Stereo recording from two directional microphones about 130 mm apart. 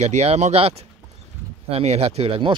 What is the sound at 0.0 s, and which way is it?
Speech, 60° right (ahead or behind).